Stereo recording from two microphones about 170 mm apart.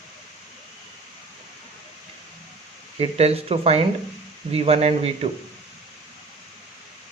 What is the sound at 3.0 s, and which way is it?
Speech, 35° right (ahead or behind).